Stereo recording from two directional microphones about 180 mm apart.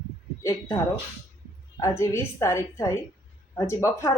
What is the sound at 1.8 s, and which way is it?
A woman's voice, 15° left (ahead or behind).